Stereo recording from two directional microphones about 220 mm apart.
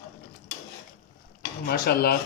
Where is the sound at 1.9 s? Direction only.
45° left (ahead or behind).